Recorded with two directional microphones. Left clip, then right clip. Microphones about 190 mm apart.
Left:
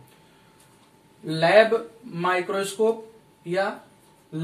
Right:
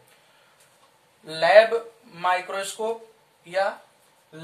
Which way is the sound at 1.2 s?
20° right (ahead or behind).